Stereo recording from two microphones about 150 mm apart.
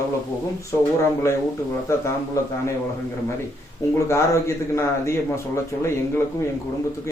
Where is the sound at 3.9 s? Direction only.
20° left (ahead or behind).